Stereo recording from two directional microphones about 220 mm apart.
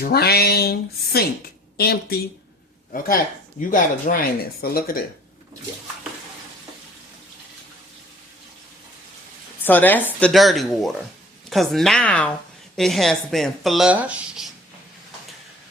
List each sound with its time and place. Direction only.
0.0 s speech: 45° left (ahead or behind)
9.6 s speech: 10° left (ahead or behind)